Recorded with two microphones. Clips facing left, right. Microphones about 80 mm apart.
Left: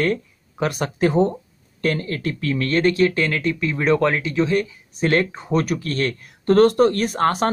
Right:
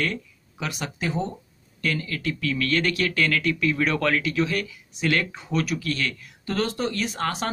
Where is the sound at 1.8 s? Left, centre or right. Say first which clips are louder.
Left 5 dB; left.